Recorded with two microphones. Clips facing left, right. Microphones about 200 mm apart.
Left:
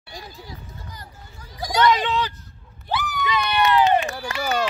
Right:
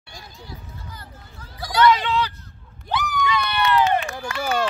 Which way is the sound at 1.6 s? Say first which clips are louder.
Right 1 dB; 15° left (ahead or behind).